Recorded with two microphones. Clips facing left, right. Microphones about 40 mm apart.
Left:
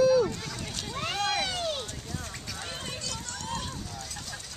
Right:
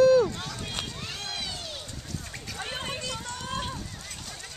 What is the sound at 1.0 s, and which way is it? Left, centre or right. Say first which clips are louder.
Vehicle: left 7 dB; left.